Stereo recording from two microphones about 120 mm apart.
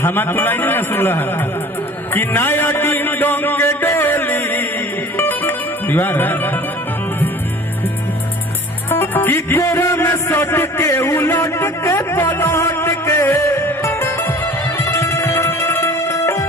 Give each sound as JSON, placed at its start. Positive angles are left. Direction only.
{"t": 0.0, "sound": "a man's voice", "side_deg": 15}
{"t": 5.1, "sound": "music", "side_deg": 20}
{"t": 8.9, "sound": "music", "side_deg": 20}